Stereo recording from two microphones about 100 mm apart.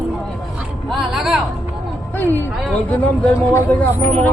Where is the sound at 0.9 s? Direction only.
Centre (ahead or behind).